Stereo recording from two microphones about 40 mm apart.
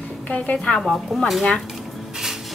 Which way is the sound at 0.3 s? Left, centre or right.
Left.